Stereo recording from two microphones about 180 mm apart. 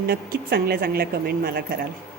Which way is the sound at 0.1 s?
60° right (ahead or behind).